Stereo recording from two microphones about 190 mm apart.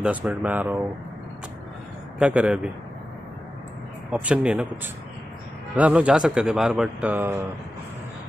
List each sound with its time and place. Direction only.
0.0 s speech: 5° right (ahead or behind)
2.1 s speech: 5° right (ahead or behind)
4.1 s speech: 5° right (ahead or behind)
5.8 s speech: 5° right (ahead or behind)